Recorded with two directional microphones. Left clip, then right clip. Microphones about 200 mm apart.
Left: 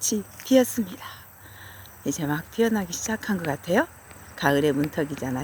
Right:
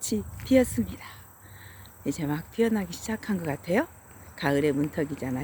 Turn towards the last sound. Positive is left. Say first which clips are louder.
# left 3 dB
turn(degrees=-5)  # may be behind; listen again after turning